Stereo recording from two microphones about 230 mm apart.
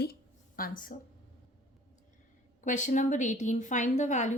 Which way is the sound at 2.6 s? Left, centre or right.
Left.